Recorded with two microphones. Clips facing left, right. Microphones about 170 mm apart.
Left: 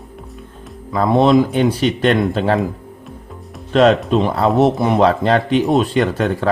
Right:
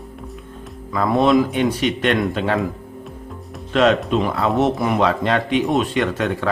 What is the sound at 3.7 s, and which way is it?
Speech, 35° left (ahead or behind).